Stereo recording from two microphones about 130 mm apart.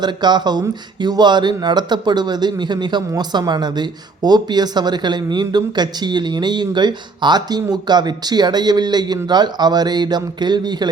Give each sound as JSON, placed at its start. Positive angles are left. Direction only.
{"t": 0.0, "sound": "speech", "side_deg": -35}